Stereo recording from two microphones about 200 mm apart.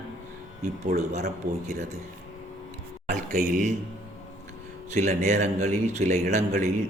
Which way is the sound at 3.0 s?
40° right (ahead or behind).